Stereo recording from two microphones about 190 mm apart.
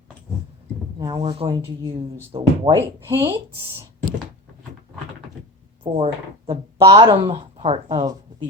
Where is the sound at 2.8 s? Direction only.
15° right (ahead or behind).